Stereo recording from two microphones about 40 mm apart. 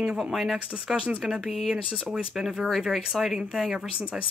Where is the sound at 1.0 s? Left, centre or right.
Right.